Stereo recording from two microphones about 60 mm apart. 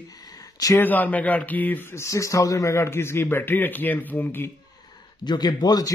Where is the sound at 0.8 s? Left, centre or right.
Left.